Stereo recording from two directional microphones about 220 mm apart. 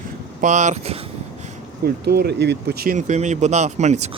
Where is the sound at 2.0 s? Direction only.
45° right (ahead or behind).